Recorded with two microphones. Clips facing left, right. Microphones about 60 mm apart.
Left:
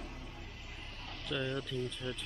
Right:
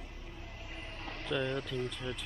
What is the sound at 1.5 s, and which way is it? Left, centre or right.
Speech, right.